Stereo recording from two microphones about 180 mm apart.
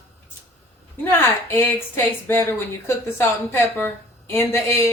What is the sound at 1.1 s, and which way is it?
A woman's voice, 15° left (ahead or behind).